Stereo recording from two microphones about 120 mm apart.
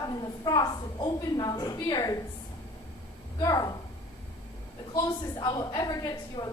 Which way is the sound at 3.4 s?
35° left (ahead or behind).